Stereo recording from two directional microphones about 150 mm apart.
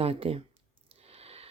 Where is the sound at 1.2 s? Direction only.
45° right (ahead or behind).